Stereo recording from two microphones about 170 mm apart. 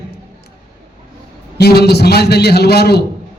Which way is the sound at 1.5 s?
70° left (ahead or behind).